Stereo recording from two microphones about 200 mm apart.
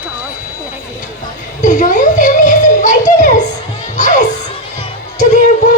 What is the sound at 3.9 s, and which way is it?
Music, 40° left (ahead or behind).